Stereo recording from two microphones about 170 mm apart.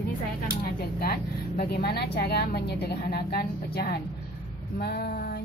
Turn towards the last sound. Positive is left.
turn(degrees=65)  # may be behind; listen again after turning